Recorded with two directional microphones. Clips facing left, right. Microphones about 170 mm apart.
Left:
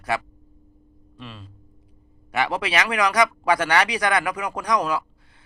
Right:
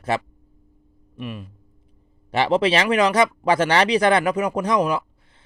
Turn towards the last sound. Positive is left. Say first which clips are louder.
# right 3 dB
turn(degrees=-20)  # may be behind; listen again after turning